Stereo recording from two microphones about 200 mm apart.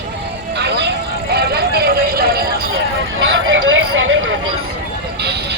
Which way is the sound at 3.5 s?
80° right.